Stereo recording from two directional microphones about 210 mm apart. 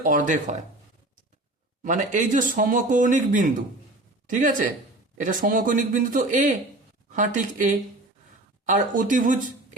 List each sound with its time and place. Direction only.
0.0 s speech: 40° right (ahead or behind)
1.8 s speech: 35° right (ahead or behind)